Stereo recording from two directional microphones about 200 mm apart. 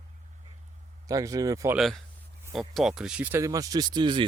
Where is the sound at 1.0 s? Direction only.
15° right (ahead or behind).